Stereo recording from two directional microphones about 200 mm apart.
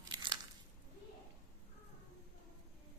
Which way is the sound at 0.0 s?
20° right (ahead or behind).